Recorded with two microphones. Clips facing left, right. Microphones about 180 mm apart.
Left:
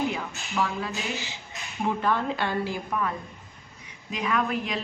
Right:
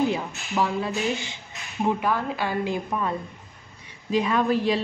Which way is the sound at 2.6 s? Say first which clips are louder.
Right 2 dB; 25° right (ahead or behind).